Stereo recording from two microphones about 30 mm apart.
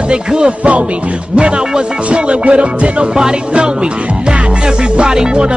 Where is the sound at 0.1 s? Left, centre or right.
Right.